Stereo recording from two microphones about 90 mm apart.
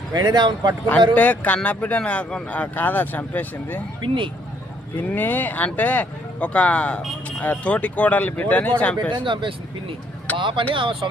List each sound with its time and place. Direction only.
0.1 s speech: 50° right (ahead or behind)
1.1 s speech: 15° left (ahead or behind)
4.0 s speech: 65° right (ahead or behind)
4.9 s speech: 20° left (ahead or behind)
9.0 s speech: 65° right (ahead or behind)